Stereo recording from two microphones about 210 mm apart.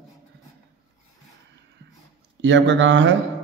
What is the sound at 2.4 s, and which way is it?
Speech, 60° right (ahead or behind).